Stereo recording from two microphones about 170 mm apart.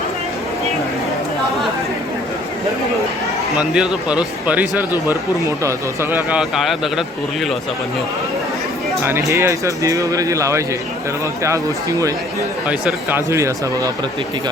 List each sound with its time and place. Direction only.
3.5 s a man's voice: 5° right (ahead or behind)
9.3 s speech: 20° right (ahead or behind)
12.6 s a man's voice: 10° right (ahead or behind)